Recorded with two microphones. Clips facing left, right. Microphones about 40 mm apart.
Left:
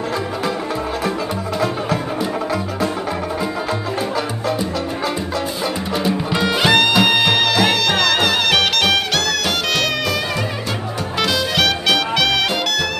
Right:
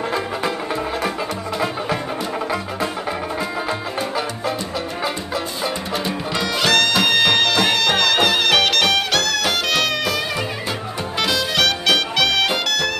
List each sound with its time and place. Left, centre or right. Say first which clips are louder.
6.0 s music: left 7 dB; centre
6.9 s music: left 2 dB; centre
11.1 s music: left 1 dB; centre